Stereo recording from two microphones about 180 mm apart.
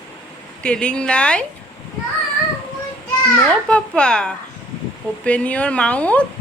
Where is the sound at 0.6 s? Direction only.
5° left (ahead or behind).